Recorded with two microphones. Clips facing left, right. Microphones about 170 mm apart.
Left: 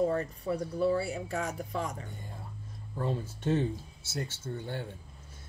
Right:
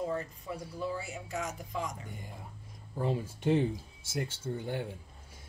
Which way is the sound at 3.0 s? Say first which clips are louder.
Right 1 dB; 10° right (ahead or behind).